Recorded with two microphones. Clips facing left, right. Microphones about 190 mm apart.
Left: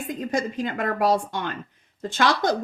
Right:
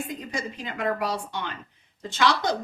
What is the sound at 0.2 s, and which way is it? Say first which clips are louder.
A woman's voice: left 8 dB; 50° left (ahead or behind).